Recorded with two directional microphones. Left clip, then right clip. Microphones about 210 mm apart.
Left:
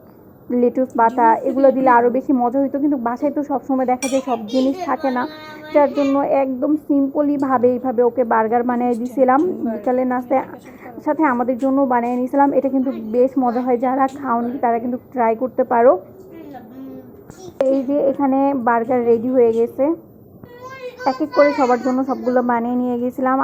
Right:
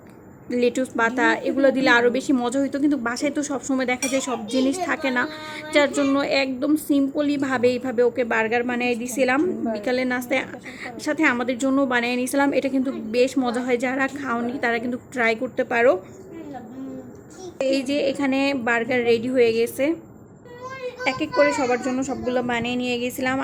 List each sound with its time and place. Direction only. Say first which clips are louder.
0.5 s a woman's voice: left 5 dB; 15° right (ahead or behind)
4.0 s a child's voice: left 4 dB; centre (ahead or behind)
4.9 s speech: left 3 dB; 20° right (ahead or behind)
5.9 s a child's voice: left 4 dB; centre (ahead or behind)
6.1 s a woman's voice: left 5 dB; 20° right (ahead or behind)
9.4 s a child's voice: left 3 dB; centre (ahead or behind)
9.8 s a woman's voice: left 6 dB; 15° right (ahead or behind)
12.8 s a child's voice: left 4 dB; centre (ahead or behind)
13.1 s a woman's voice: left 5 dB; 15° right (ahead or behind)
17.7 s a woman's voice: left 4 dB; 15° right (ahead or behind)
20.8 s a child's voice: left 4 dB; centre (ahead or behind)
22.6 s speech: left 4 dB; 30° left (ahead or behind)